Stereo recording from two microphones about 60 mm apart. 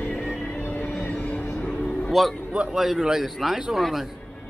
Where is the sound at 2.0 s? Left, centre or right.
Centre.